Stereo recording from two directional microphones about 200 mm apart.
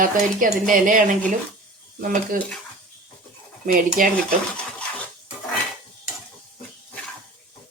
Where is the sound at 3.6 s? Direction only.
45° right (ahead or behind).